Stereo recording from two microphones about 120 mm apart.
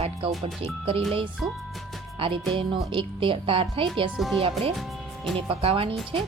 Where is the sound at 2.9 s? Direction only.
45° right (ahead or behind).